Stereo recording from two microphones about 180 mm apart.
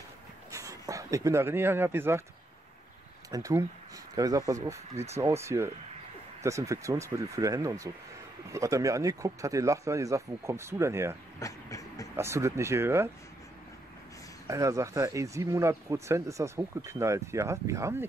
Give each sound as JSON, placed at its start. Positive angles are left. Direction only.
{"t": 0.5, "sound": "speech", "side_deg": -20}
{"t": 3.3, "sound": "speech", "side_deg": -20}
{"t": 11.3, "sound": "vehicle", "side_deg": 20}
{"t": 12.2, "sound": "speech", "side_deg": -15}
{"t": 14.5, "sound": "speech", "side_deg": -15}